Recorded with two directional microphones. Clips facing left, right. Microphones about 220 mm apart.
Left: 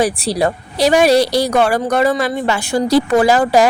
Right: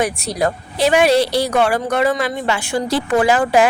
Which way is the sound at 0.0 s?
30° left (ahead or behind).